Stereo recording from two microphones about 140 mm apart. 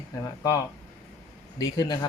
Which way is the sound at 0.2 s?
25° left (ahead or behind).